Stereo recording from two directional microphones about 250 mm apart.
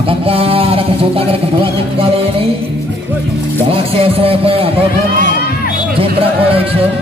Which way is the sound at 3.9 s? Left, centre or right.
Right.